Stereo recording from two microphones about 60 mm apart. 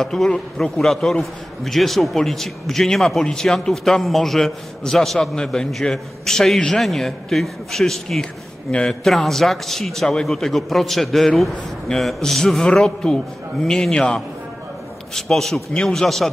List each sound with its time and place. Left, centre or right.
0.0 s a man's voice: centre